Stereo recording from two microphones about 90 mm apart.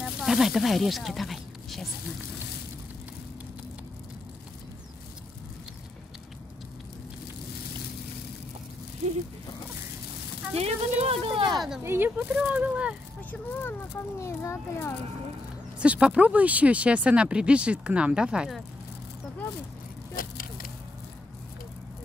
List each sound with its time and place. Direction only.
0.0 s speech: 5° right (ahead or behind)
10.6 s a sound: 90° right
11.5 s speech: centre (ahead or behind)
11.8 s speech: 25° right (ahead or behind)
13.3 s a child's voice: 25° left (ahead or behind)
15.8 s speech: 10° right (ahead or behind)